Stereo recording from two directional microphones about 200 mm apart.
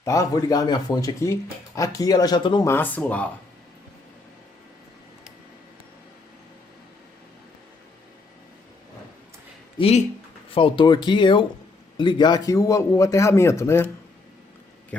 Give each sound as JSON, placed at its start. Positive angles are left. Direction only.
{"t": 0.0, "sound": "speech", "side_deg": 15}
{"t": 2.6, "sound": "speech", "side_deg": 10}
{"t": 9.7, "sound": "speech", "side_deg": 30}